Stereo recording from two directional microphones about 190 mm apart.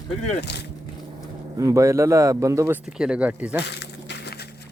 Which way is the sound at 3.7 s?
65° left (ahead or behind).